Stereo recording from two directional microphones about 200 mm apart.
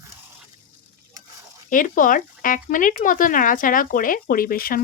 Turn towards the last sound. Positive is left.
turn(degrees=45)  # may be behind; listen again after turning